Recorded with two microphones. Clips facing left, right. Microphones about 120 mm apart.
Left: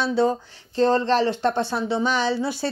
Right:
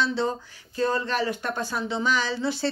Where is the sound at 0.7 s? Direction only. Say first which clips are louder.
Left 6 dB; 30° left (ahead or behind).